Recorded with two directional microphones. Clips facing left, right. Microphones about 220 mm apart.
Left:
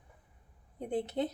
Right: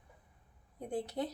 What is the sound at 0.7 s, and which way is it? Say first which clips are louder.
Speech: left 4 dB; 20° left (ahead or behind).